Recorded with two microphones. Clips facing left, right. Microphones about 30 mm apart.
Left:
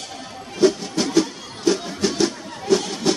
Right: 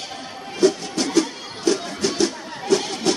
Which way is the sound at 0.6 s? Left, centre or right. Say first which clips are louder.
Left 1 dB; centre.